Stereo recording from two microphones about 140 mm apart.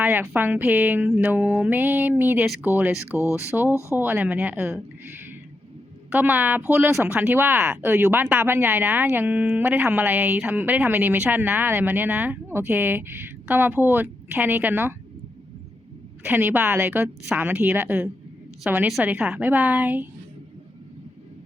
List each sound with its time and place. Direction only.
0.0 s speech: 10° right (ahead or behind)
3.2 s a sound: 20° left (ahead or behind)
3.9 s speech: 15° right (ahead or behind)
16.2 s a woman's voice: 15° right (ahead or behind)